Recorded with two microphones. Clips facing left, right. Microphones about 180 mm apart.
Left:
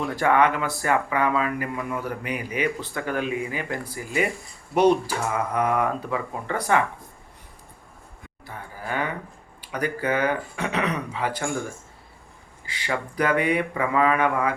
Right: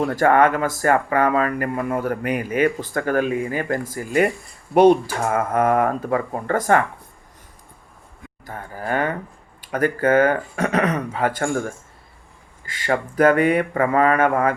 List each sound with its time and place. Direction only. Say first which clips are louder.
0.0 s speech: right 4 dB; 45° right (ahead or behind)
8.4 s livestock: right 6 dB; 50° right (ahead or behind)
9.6 s speech: right 6 dB; 50° right (ahead or behind)
12.6 s speech: right 6 dB; 45° right (ahead or behind)